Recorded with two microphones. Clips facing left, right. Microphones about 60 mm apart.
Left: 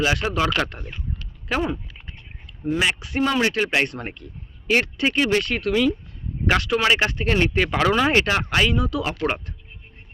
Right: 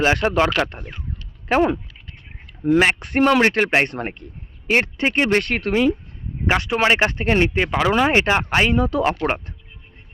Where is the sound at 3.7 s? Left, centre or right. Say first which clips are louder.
Right 4 dB; right.